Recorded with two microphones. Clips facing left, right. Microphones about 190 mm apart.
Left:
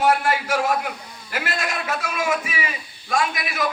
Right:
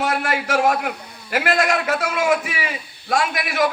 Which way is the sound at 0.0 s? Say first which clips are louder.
Left 2 dB; 70° right (ahead or behind).